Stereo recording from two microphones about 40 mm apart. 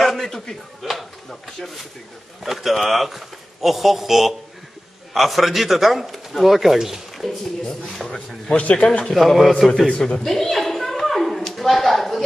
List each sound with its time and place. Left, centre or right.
0.0 s a sound: centre
2.4 s speech: centre
7.8 s speech: centre
8.5 s speech: left
9.1 s speech: centre
9.8 s speech: centre
10.2 s a sound: centre